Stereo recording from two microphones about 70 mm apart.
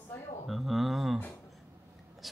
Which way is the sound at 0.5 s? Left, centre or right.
Centre.